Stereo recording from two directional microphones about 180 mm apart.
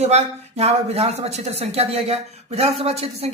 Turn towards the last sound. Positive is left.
turn(degrees=-35)  # may be behind; listen again after turning